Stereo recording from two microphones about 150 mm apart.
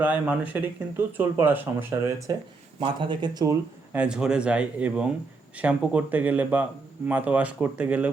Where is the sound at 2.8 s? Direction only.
35° right (ahead or behind).